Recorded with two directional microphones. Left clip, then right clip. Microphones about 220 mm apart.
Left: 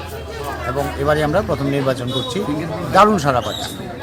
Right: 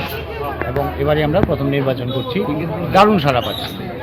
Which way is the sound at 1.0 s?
15° left (ahead or behind).